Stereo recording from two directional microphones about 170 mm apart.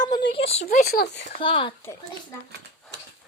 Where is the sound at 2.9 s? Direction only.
90° right.